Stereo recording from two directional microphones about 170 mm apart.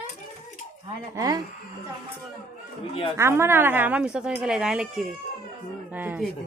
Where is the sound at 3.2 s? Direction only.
15° right (ahead or behind).